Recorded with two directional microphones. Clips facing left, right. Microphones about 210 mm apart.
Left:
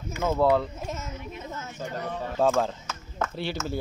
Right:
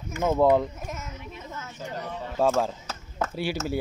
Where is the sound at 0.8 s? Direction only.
25° left (ahead or behind).